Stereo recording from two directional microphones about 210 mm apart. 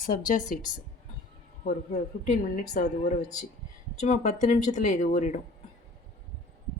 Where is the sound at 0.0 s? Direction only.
40° left (ahead or behind).